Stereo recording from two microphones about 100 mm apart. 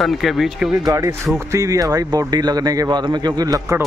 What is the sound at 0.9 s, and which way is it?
Speech, 35° right (ahead or behind).